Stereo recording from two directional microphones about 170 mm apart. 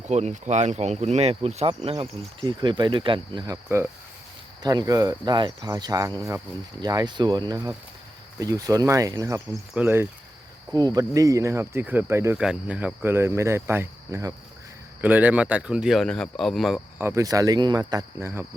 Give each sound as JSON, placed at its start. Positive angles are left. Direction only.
{"t": 0.1, "sound": "speech", "side_deg": -40}
{"t": 17.0, "sound": "speech", "side_deg": -15}